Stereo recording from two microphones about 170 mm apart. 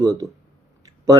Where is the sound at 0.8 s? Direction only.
20° right (ahead or behind).